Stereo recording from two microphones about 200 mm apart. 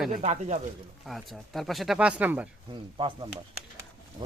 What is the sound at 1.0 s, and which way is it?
Speech, centre (ahead or behind).